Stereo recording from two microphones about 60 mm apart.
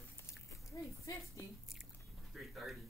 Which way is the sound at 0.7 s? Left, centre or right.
Left.